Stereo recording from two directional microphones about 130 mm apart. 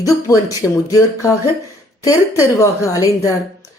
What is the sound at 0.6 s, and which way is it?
Speech, centre (ahead or behind).